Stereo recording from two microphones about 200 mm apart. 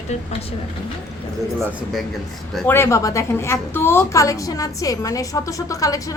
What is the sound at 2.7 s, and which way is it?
A woman's voice, 15° left (ahead or behind).